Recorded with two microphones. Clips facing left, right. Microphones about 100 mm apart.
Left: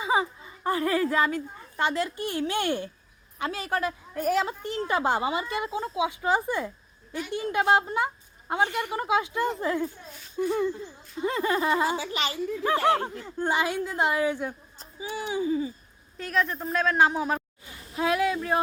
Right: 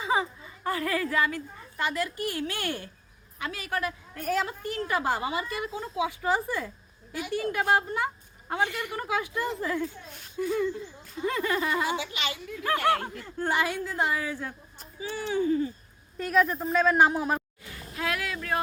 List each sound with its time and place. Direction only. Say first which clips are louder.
0.0 s a child's voice: left 2 dB; 20° left (ahead or behind)
4.1 s a woman's voice: left 4 dB; 20° left (ahead or behind); by 12.6 s 35° left (ahead or behind)
12.6 s a woman's voice: left 2 dB; 25° left (ahead or behind); by 15.7 s 10° left (ahead or behind)
16.1 s a woman's voice: right 3 dB; centre (ahead or behind)
17.9 s a woman's voice: left 7 dB; 25° left (ahead or behind)